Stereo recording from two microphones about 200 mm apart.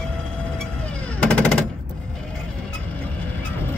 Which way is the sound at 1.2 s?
5° left (ahead or behind).